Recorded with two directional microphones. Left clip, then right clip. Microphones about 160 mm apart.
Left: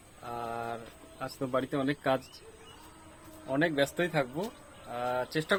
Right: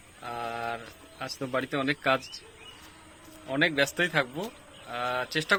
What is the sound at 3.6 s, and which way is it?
A man's voice, 10° left (ahead or behind).